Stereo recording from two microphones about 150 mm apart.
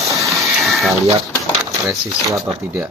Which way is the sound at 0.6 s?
Centre (ahead or behind).